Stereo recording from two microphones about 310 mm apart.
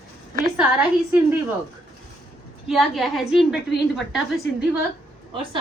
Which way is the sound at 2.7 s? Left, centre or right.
Centre.